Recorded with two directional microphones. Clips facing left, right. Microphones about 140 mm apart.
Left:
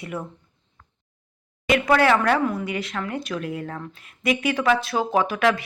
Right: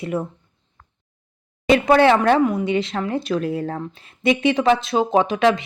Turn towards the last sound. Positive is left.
turn(degrees=-20)  # may be behind; listen again after turning